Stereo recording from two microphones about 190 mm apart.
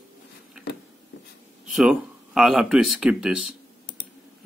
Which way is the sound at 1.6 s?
5° right (ahead or behind).